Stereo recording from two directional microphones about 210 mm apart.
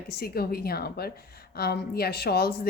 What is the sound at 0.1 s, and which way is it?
A woman's voice, 45° left (ahead or behind).